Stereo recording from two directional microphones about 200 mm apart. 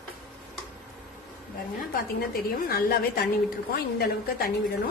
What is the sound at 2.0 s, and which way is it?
A woman's voice, 50° left (ahead or behind).